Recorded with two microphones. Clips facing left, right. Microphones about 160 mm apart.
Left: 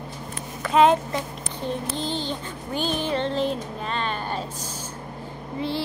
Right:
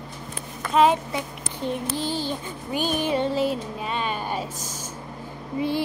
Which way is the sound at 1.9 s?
5° right (ahead or behind).